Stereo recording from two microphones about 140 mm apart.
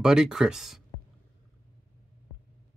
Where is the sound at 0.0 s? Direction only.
5° right (ahead or behind).